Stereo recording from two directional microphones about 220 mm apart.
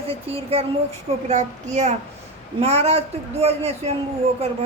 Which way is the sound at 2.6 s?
30° right (ahead or behind).